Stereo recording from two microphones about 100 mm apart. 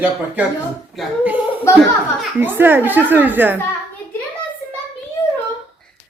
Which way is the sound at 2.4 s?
20° right (ahead or behind).